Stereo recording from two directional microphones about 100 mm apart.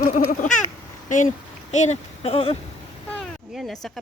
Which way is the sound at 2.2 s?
75° left (ahead or behind).